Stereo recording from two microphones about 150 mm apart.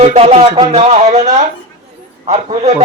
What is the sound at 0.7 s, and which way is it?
Speech, 50° right (ahead or behind).